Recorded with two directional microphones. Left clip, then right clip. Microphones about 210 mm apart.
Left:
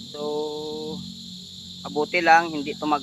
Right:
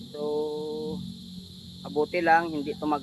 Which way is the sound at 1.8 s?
15° left (ahead or behind).